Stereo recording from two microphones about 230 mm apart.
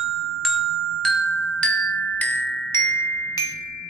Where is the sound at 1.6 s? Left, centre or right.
Centre.